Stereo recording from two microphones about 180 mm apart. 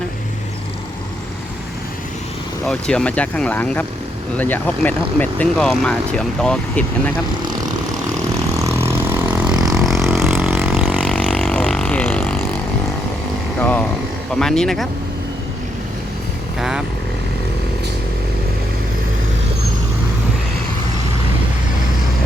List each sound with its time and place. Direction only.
2.6 s speech: 5° left (ahead or behind)
9.3 s vehicle: 5° right (ahead or behind)
9.6 s vehicle: 20° right (ahead or behind)
9.8 s vehicle: centre (ahead or behind)
11.3 s vehicle: 5° left (ahead or behind)
13.6 s vehicle: 10° left (ahead or behind)
14.3 s speech: 5° left (ahead or behind)
16.6 s vehicle: 5° right (ahead or behind)